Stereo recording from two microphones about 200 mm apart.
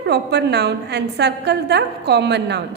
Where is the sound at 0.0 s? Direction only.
55° right (ahead or behind).